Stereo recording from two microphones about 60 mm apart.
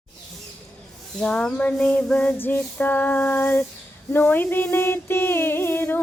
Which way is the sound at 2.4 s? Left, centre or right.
Left.